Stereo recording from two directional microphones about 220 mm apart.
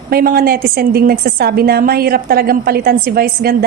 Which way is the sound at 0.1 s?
40° right (ahead or behind).